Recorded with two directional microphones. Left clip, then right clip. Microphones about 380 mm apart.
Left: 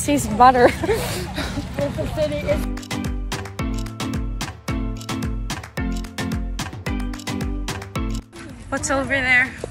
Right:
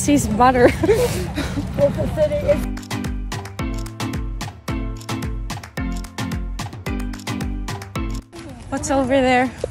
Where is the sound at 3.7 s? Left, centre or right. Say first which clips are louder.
Even; centre.